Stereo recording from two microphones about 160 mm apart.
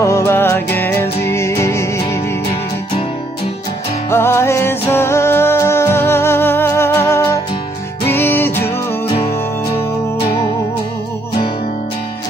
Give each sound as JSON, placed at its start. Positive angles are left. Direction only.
{"t": 0.0, "sound": "music", "side_deg": 15}
{"t": 4.1, "sound": "music", "side_deg": 15}